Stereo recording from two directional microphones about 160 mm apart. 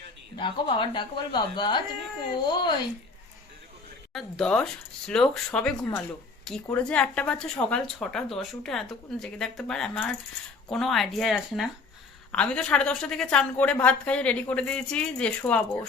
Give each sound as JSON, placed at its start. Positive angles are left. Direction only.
{"t": 0.3, "sound": "speech", "side_deg": 30}
{"t": 4.1, "sound": "a woman's voice", "side_deg": 5}